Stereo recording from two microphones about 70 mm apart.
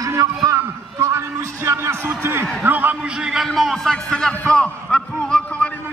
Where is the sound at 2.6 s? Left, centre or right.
Right.